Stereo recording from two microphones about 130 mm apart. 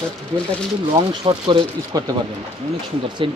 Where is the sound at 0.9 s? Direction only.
35° right (ahead or behind).